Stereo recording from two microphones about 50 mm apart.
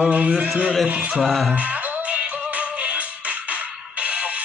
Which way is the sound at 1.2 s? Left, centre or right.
Centre.